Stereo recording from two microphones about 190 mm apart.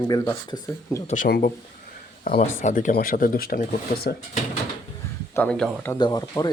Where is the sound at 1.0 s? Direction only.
45° left (ahead or behind).